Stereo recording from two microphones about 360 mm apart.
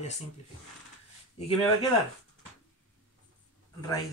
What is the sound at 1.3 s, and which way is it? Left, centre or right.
Speech, centre.